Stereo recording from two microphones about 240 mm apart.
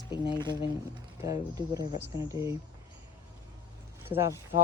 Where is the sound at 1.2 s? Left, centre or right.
Centre.